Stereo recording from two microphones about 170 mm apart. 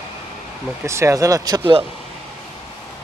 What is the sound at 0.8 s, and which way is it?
Speech, 15° right (ahead or behind).